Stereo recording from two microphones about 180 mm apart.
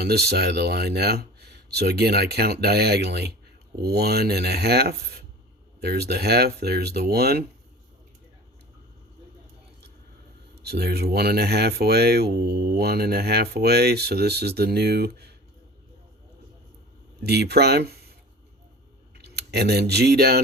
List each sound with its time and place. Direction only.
0.0 s speech: 60° right (ahead or behind)
10.6 s speech: 65° right (ahead or behind)
17.2 s speech: 65° right (ahead or behind)
19.1 s speech: 65° right (ahead or behind)